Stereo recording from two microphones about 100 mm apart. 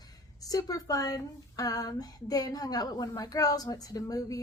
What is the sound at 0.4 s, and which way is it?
Speech, 40° left (ahead or behind).